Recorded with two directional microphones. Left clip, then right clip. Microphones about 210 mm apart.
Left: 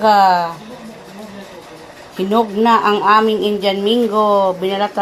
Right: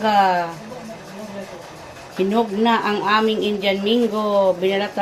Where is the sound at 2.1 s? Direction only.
25° left (ahead or behind).